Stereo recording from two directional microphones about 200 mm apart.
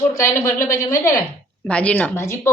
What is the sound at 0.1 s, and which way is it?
A man's voice, 15° left (ahead or behind).